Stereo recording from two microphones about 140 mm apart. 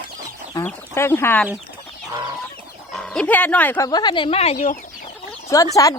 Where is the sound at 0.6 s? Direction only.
15° left (ahead or behind).